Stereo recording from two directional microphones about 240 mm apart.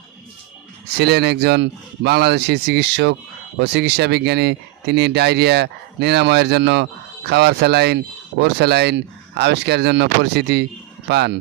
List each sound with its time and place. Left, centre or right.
0.9 s speech: right